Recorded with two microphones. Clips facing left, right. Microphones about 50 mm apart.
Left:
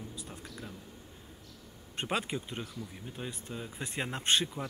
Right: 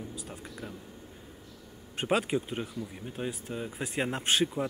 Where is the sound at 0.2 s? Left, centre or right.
Centre.